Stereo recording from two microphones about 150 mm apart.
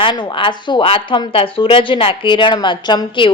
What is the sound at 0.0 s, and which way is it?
Speech, 30° left (ahead or behind).